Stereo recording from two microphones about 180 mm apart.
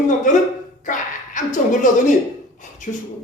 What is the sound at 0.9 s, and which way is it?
A woman's voice, 45° left (ahead or behind).